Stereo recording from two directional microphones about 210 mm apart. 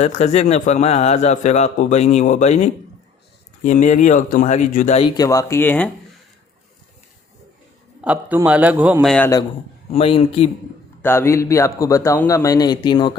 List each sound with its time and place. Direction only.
0.0 s speech: 30° left (ahead or behind); by 5.9 s 10° left (ahead or behind)
8.0 s a man's voice: 5° right (ahead or behind)
9.9 s speech: 25° left (ahead or behind)
11.0 s a man's voice: 10° left (ahead or behind)